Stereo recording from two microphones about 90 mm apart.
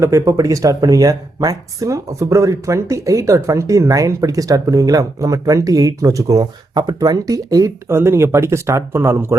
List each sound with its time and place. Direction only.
0.0 s speech: 35° right (ahead or behind)